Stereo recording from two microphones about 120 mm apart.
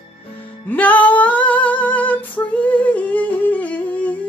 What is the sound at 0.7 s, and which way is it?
Music, 15° left (ahead or behind).